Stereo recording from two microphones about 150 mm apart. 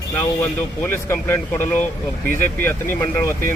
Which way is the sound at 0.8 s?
15° left (ahead or behind).